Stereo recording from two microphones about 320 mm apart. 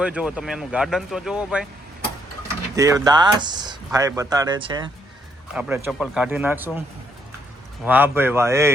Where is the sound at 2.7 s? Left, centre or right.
Centre.